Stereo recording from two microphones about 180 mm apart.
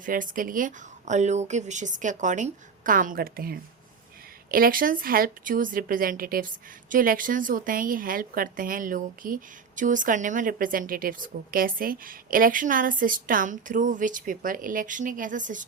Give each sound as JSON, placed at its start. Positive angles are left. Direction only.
{"t": 0.0, "sound": "a woman's voice", "side_deg": -50}